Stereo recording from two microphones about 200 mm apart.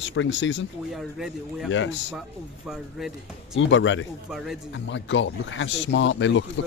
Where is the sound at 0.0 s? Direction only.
70° left (ahead or behind).